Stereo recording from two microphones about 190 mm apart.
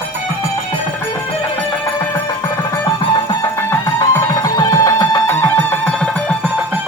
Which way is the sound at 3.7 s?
15° left (ahead or behind).